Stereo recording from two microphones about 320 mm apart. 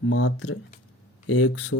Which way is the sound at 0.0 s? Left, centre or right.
Left.